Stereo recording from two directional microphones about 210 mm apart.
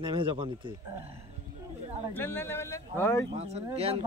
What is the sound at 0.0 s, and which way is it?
Speech, 25° right (ahead or behind).